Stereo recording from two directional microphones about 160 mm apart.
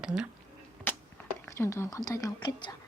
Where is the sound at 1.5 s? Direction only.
15° left (ahead or behind).